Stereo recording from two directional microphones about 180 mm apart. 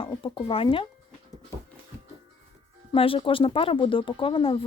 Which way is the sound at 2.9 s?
30° left (ahead or behind).